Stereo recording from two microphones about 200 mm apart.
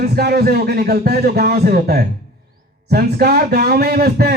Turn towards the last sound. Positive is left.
turn(degrees=-50)  # may be behind; listen again after turning